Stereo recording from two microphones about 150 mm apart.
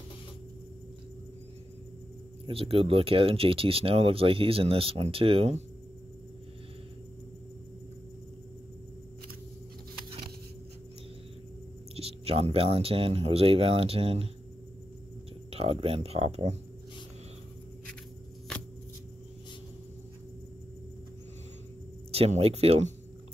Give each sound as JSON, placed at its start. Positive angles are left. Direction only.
{"t": 2.4, "sound": "speech", "side_deg": -40}
{"t": 11.9, "sound": "speech", "side_deg": -40}
{"t": 15.5, "sound": "speech", "side_deg": -40}
{"t": 22.1, "sound": "speech", "side_deg": -40}